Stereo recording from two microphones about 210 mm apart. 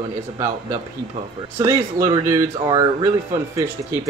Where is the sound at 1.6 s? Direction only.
15° right (ahead or behind).